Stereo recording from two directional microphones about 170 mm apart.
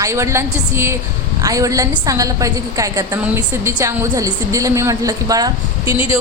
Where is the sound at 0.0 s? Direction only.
15° right (ahead or behind).